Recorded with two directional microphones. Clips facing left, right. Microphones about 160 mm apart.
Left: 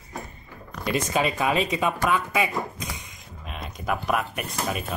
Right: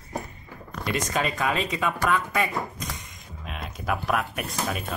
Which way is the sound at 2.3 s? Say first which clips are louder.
Left 1 dB; 5° left (ahead or behind).